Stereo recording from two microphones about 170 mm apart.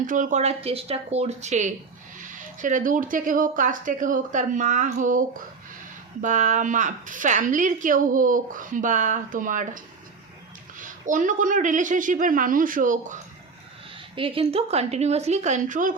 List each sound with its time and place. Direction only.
0.0 s a woman's voice: 50° right (ahead or behind)
6.2 s a woman's voice: 45° right (ahead or behind)
13.9 s a woman's voice: 30° right (ahead or behind); by 16.0 s 50° right (ahead or behind)